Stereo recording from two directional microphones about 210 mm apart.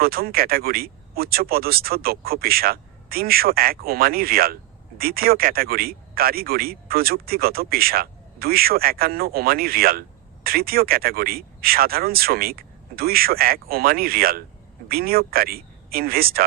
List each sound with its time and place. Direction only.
0.0 s speech: 45° right (ahead or behind)